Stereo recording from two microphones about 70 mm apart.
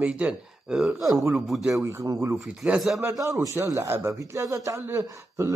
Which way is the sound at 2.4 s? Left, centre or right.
Centre.